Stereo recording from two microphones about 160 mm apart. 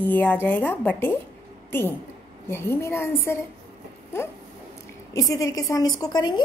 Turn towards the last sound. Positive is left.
turn(degrees=25)  # may be behind; listen again after turning